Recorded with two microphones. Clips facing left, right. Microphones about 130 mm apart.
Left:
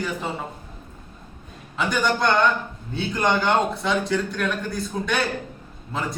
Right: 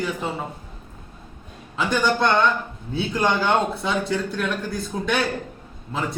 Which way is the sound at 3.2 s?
5° right (ahead or behind).